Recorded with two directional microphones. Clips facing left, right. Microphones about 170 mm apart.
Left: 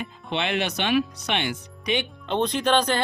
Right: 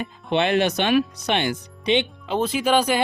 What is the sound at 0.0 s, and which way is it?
Speech, 45° right (ahead or behind).